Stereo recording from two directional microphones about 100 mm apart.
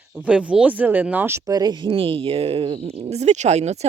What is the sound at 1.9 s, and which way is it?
Speech, 65° right (ahead or behind).